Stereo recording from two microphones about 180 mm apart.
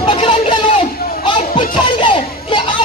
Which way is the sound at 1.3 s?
30° left (ahead or behind).